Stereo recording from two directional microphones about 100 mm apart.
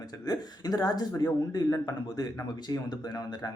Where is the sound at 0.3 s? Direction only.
40° left (ahead or behind).